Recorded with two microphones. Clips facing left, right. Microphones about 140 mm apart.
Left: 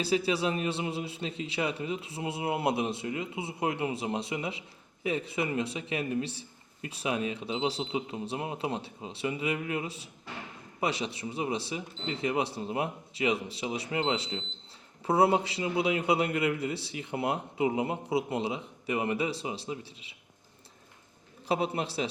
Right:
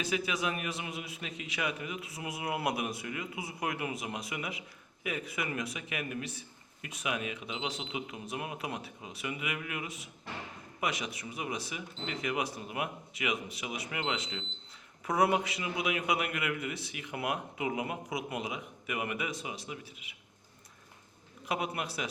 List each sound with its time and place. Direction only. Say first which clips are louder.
0.0 s a man's voice: left 5 dB; 30° left (ahead or behind)
21.4 s a man's voice: left 5 dB; 30° left (ahead or behind)